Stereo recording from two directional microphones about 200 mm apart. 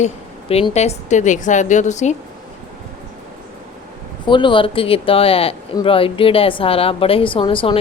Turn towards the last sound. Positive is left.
turn(degrees=25)  # may be behind; listen again after turning